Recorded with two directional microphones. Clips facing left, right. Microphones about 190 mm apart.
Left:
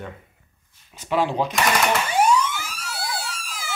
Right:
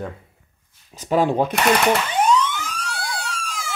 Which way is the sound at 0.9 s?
40° right (ahead or behind).